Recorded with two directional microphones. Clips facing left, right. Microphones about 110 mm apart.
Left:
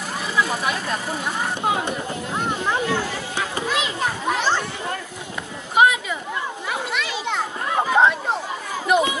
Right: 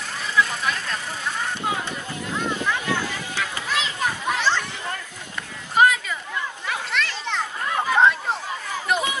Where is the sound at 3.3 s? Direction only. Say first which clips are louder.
Left 3 dB; 15° left (ahead or behind).